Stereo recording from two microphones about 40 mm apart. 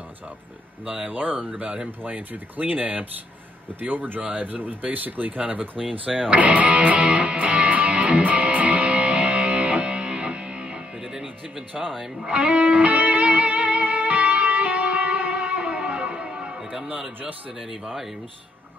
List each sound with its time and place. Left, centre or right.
0.8 s speech: right
6.3 s music: right
11.0 s music: centre
11.7 s speech: centre
12.2 s music: right